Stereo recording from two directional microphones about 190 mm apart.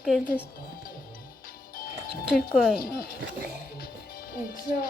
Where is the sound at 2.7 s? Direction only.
50° left (ahead or behind).